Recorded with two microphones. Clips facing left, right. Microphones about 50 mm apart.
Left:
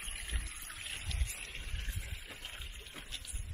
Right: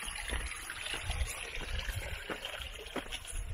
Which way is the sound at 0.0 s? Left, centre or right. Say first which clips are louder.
Right 5 dB; right.